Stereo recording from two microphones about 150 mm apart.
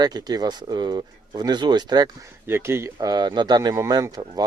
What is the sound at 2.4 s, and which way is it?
Speech, 15° right (ahead or behind).